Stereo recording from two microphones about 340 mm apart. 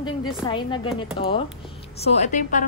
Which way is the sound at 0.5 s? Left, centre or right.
Centre.